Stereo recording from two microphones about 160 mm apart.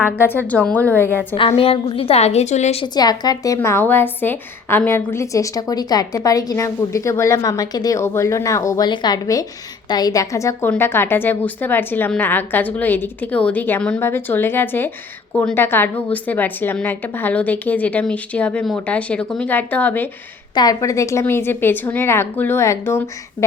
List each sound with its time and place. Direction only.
0.0 s a woman's voice: 15° left (ahead or behind)
1.4 s a woman's voice: 35° left (ahead or behind)
2.8 s a woman's voice: 25° left (ahead or behind)
20.6 s a woman's voice: 20° left (ahead or behind)